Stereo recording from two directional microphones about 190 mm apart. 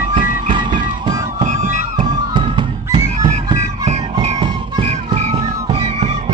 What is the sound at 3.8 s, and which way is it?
Music, 35° right (ahead or behind).